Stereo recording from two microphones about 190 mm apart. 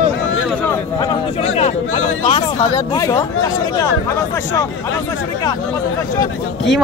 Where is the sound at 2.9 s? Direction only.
15° left (ahead or behind).